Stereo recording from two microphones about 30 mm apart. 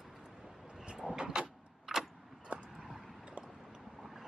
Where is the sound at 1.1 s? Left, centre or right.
Right.